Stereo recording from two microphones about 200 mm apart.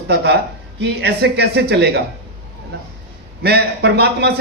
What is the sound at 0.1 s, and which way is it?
A man's voice, 55° right (ahead or behind).